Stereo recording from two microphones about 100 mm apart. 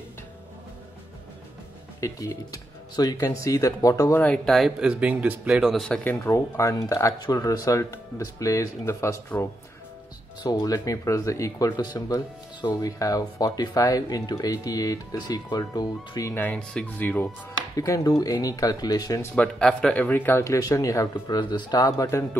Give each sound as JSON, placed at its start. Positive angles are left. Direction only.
{"t": 2.0, "sound": "speech", "side_deg": 35}
{"t": 4.1, "sound": "speech", "side_deg": 15}
{"t": 4.5, "sound": "speech", "side_deg": 0}
{"t": 6.0, "sound": "speech", "side_deg": 30}
{"t": 10.4, "sound": "speech", "side_deg": 40}
{"t": 16.3, "sound": "speech", "side_deg": 15}
{"t": 17.7, "sound": "speech", "side_deg": 35}
{"t": 19.3, "sound": "speech", "side_deg": 10}
{"t": 20.5, "sound": "speech", "side_deg": 35}
{"t": 21.4, "sound": "speech", "side_deg": 45}